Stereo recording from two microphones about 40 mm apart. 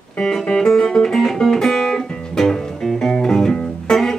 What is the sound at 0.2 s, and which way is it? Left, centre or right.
Music, centre.